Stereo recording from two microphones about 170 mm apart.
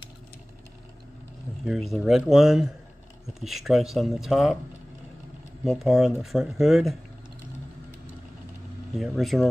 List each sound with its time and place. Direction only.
1.6 s speech: centre (ahead or behind)
5.7 s speech: centre (ahead or behind)
8.9 s speech: centre (ahead or behind)